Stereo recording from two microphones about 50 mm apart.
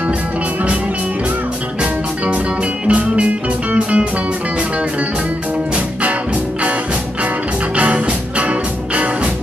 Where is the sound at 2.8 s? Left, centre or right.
Right.